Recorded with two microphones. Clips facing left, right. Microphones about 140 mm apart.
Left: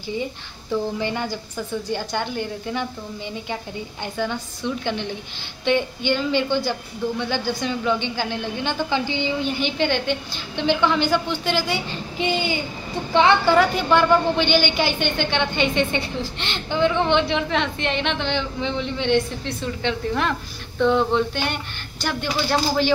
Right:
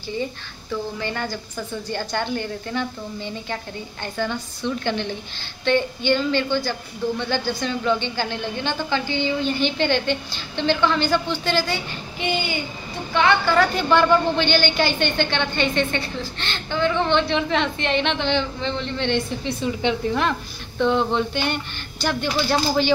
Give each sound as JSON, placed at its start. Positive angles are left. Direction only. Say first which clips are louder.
{"t": 0.9, "sound": "a woman's voice", "louder": "left 3 dB", "side_deg": 20}
{"t": 1.9, "sound": "a woman's voice", "louder": "right 4 dB", "side_deg": 10}
{"t": 4.0, "sound": "a woman's voice", "louder": "even", "side_deg": 10}
{"t": 13.1, "sound": "a woman's voice", "louder": "left 2 dB", "side_deg": 25}
{"t": 13.6, "sound": "a woman's voice", "louder": "even", "side_deg": 5}
{"t": 17.4, "sound": "a woman's voice", "louder": "right 1 dB", "side_deg": 0}
{"t": 19.4, "sound": "a woman's voice", "louder": "right 3 dB", "side_deg": -10}
{"t": 20.8, "sound": "a woman's voice", "louder": "left 1 dB", "side_deg": 0}